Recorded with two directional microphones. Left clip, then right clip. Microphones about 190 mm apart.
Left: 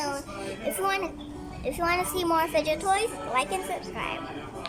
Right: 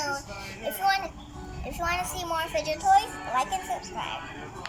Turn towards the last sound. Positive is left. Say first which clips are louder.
# even
turn(degrees=20)  # may be behind; listen again after turning